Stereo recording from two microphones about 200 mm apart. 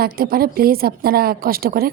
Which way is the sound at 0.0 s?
45° right (ahead or behind).